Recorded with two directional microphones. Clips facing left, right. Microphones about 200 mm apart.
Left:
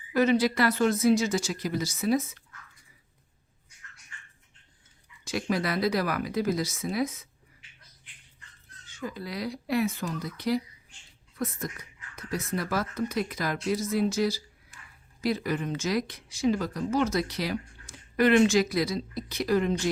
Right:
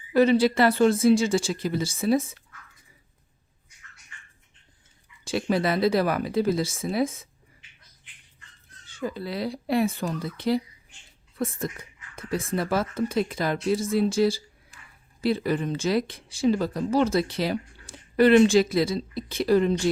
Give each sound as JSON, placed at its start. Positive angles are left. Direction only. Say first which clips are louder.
{"t": 0.1, "sound": "speech", "louder": "right 4 dB", "side_deg": -30}
{"t": 5.2, "sound": "speech", "louder": "right 4 dB", "side_deg": -30}
{"t": 8.9, "sound": "speech", "louder": "right 5 dB", "side_deg": -30}